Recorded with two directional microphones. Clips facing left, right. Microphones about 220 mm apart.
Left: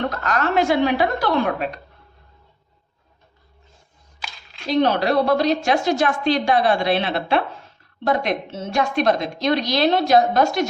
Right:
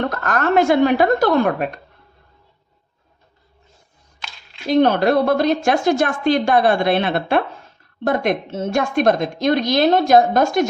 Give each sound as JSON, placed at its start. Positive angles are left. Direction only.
{"t": 0.1, "sound": "a woman's voice", "side_deg": -50}
{"t": 4.7, "sound": "a woman's voice", "side_deg": -50}